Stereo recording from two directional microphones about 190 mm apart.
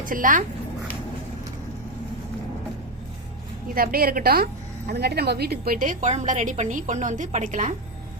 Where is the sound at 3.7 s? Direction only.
50° right (ahead or behind).